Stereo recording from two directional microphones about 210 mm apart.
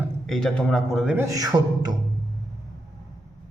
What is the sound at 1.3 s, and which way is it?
Beatboxing, 15° right (ahead or behind).